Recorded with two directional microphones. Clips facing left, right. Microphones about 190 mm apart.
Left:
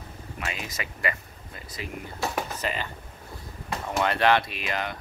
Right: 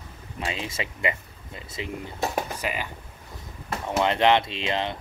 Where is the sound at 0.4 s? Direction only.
25° right (ahead or behind).